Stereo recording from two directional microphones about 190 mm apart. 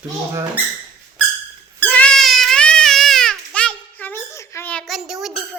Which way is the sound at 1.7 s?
10° left (ahead or behind).